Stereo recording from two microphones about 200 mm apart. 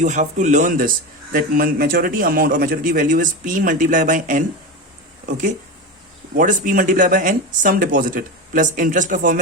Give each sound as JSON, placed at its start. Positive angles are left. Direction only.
{"t": 0.0, "sound": "speech", "side_deg": -35}
{"t": 6.3, "sound": "speech", "side_deg": -40}